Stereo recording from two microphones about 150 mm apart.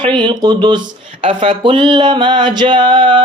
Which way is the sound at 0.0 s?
30° right (ahead or behind).